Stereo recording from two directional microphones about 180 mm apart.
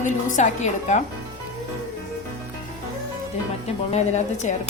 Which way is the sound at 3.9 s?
40° left (ahead or behind).